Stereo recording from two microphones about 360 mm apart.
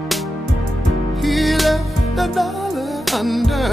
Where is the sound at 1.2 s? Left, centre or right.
Centre.